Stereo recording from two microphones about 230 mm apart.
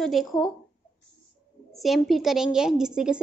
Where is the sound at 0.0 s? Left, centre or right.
Centre.